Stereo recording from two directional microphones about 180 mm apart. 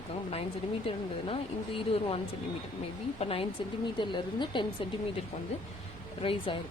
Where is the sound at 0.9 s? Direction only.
30° left (ahead or behind).